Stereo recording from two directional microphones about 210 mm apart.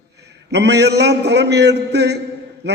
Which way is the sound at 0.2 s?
55° right (ahead or behind).